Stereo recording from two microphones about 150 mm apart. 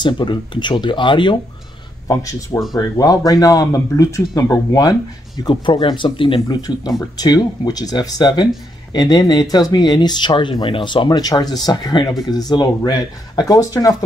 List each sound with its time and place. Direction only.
0.0 s speech: 30° left (ahead or behind)
2.0 s speech: 20° left (ahead or behind)